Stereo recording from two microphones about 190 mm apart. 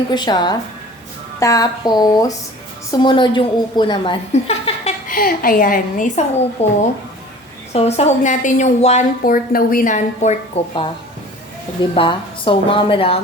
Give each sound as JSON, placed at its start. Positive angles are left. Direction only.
{"t": 0.1, "sound": "a woman's voice", "side_deg": 25}
{"t": 5.0, "sound": "a woman's voice", "side_deg": 50}
{"t": 6.6, "sound": "a woman's voice", "side_deg": 35}